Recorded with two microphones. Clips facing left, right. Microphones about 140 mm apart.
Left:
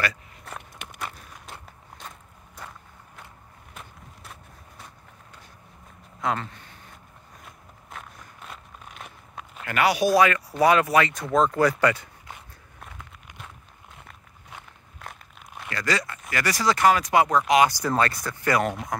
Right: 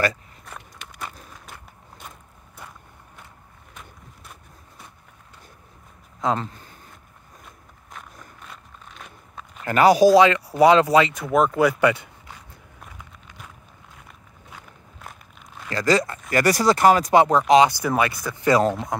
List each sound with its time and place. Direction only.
6.2 s speech: 35° right (ahead or behind)
8.5 s a sound: 10° left (ahead or behind)
9.7 s speech: 35° right (ahead or behind)
10.1 s speech: 25° right (ahead or behind)
11.1 s speech: 5° right (ahead or behind)
15.7 s speech: 35° right (ahead or behind)
17.8 s speech: 10° right (ahead or behind)
18.6 s speech: 30° right (ahead or behind)